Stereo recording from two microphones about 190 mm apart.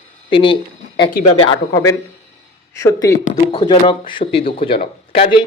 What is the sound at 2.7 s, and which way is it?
Speech, 15° left (ahead or behind).